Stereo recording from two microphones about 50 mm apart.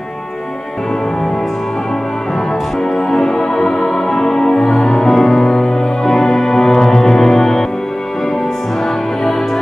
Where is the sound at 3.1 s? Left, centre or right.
Centre.